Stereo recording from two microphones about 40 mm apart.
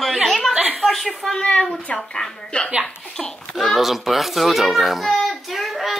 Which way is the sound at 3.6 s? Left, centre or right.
Centre.